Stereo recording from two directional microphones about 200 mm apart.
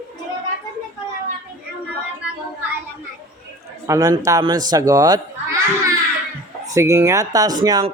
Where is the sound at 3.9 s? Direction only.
15° right (ahead or behind).